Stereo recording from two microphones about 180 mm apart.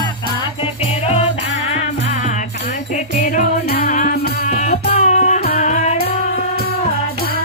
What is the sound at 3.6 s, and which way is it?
Music, 55° left (ahead or behind).